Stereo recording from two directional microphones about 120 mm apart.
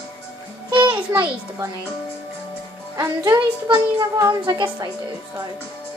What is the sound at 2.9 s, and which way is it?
A woman's voice, 30° right (ahead or behind).